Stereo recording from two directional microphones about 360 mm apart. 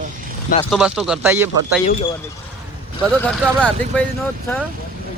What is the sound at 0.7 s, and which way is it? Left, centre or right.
Speech, centre.